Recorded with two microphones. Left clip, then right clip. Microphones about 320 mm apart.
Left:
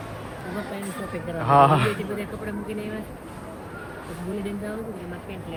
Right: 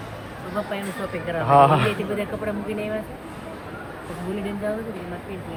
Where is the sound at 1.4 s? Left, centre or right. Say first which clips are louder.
Right 2 dB; centre.